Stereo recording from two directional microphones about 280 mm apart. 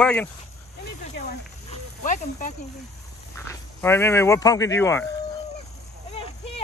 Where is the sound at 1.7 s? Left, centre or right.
Left.